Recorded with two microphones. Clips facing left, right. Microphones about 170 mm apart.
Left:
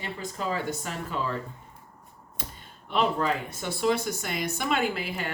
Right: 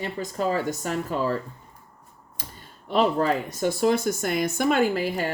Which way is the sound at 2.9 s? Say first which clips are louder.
Right 4 dB; 40° right (ahead or behind).